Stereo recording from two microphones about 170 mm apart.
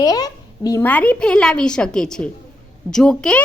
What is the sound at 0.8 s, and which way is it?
A woman's voice, 10° left (ahead or behind).